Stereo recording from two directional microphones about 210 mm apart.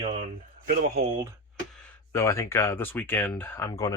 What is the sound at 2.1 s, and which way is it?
Speech, 15° left (ahead or behind).